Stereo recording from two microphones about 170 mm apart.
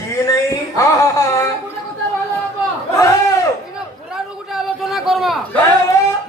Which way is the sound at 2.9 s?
20° left (ahead or behind).